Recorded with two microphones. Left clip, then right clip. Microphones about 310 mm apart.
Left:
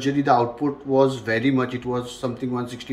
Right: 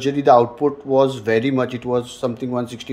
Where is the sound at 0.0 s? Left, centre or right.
Right.